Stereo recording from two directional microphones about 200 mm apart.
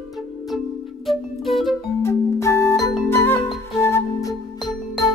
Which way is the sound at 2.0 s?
15° left (ahead or behind).